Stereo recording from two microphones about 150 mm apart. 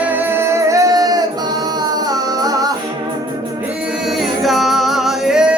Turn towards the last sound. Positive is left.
turn(degrees=-5)  # may be behind; listen again after turning